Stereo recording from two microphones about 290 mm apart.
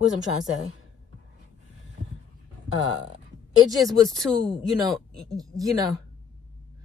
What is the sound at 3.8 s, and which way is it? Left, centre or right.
A woman's voice, centre.